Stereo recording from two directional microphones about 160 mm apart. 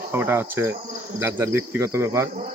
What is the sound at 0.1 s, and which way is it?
Speech, 15° right (ahead or behind).